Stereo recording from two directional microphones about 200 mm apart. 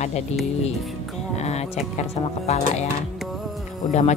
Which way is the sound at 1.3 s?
35° left (ahead or behind).